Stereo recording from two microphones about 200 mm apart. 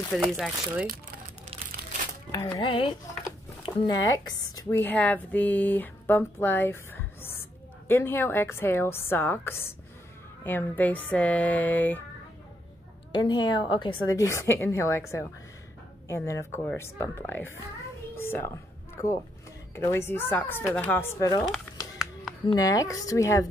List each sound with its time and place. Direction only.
0.1 s speech: centre (ahead or behind)
2.3 s a woman's voice: 20° left (ahead or behind)
13.2 s a woman's voice: 20° left (ahead or behind)
18.1 s a sound: 10° left (ahead or behind)
19.7 s a woman's voice: 15° left (ahead or behind)
22.5 s a woman's voice: 15° left (ahead or behind)